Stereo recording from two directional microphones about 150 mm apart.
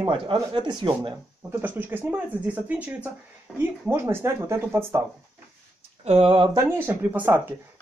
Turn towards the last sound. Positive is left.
turn(degrees=-15)  # may be behind; listen again after turning